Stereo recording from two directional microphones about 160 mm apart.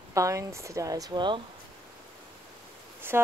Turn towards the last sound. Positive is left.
turn(degrees=-15)  # may be behind; listen again after turning